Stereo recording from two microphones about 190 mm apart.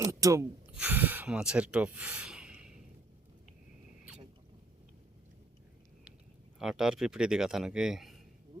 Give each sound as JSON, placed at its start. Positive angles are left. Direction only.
{"t": 0.0, "sound": "a sound", "side_deg": -15}
{"t": 0.7, "sound": "speech", "side_deg": -5}
{"t": 6.6, "sound": "speech", "side_deg": 0}